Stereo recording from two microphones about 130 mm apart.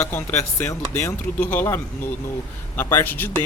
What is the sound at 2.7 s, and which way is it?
Speech, 15° left (ahead or behind).